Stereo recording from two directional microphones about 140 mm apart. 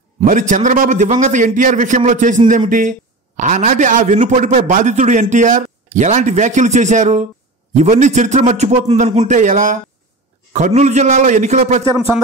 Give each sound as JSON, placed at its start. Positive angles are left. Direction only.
{"t": 0.2, "sound": "a man's voice", "side_deg": -65}
{"t": 9.3, "sound": "a man's voice", "side_deg": -65}